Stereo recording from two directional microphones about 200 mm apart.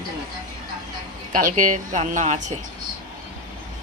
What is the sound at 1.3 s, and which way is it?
A woman's voice, 40° right (ahead or behind).